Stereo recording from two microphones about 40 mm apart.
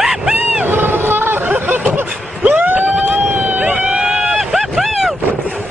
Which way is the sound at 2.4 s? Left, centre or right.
Right.